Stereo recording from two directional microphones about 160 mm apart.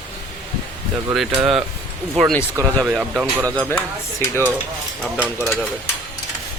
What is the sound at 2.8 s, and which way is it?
Speech, 5° right (ahead or behind).